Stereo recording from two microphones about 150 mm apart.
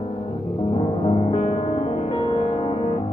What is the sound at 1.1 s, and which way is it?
Music, 40° left (ahead or behind).